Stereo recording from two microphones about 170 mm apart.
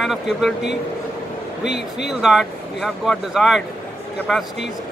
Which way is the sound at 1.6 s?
85° left.